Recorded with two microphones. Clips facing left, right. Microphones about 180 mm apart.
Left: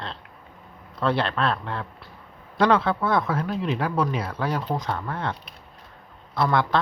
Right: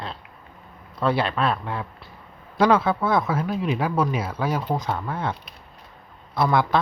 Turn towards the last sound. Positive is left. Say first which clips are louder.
# right 2 dB
turn(degrees=-10)  # may be behind; listen again after turning